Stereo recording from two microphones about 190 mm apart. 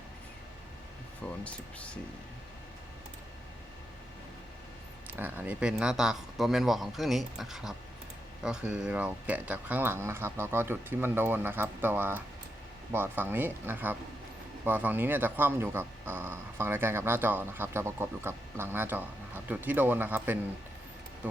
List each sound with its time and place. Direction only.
1.5 s speech: 5° left (ahead or behind)
5.1 s speech: 10° right (ahead or behind)